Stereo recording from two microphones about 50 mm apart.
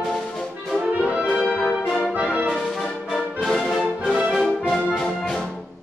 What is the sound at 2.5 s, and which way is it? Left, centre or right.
Music, centre.